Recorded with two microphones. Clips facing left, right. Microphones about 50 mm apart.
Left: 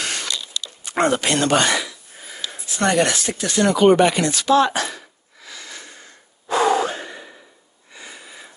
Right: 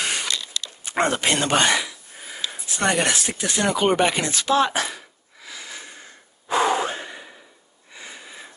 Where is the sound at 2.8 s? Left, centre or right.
Right.